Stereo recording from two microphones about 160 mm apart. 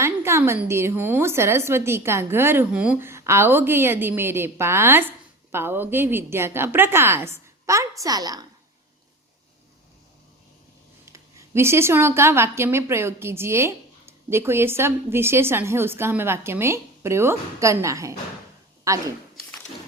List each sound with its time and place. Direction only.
0.0 s a woman's voice: 15° right (ahead or behind)
11.0 s a woman's voice: 15° right (ahead or behind)